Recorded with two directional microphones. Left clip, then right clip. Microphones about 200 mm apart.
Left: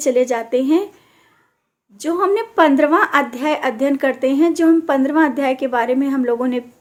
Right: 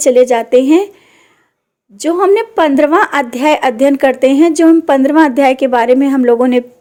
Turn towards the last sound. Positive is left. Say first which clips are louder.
# right 9 dB
turn(degrees=-40)  # may be behind; listen again after turning